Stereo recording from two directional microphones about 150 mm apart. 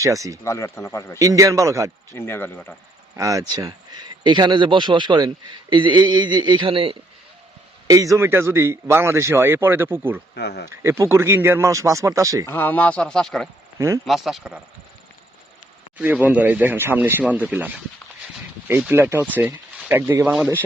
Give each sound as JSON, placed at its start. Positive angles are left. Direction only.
{"t": 0.0, "sound": "speech", "side_deg": -20}
{"t": 0.4, "sound": "speech", "side_deg": 20}
{"t": 1.2, "sound": "speech", "side_deg": -20}
{"t": 2.1, "sound": "speech", "side_deg": 15}
{"t": 3.2, "sound": "speech", "side_deg": -20}
{"t": 7.9, "sound": "a man's voice", "side_deg": -20}
{"t": 10.3, "sound": "speech", "side_deg": 90}
{"t": 10.7, "sound": "speech", "side_deg": -20}
{"t": 12.5, "sound": "speech", "side_deg": 15}
{"t": 13.7, "sound": "speech", "side_deg": -20}
{"t": 14.1, "sound": "speech", "side_deg": 0}
{"t": 16.0, "sound": "a man's voice", "side_deg": -10}